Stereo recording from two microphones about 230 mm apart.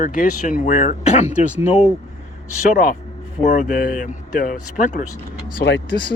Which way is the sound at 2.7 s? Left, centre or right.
Left.